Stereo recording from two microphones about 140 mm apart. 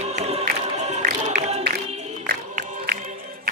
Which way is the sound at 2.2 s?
90° right.